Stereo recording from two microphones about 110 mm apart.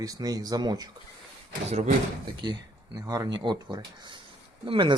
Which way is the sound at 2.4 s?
40° right (ahead or behind).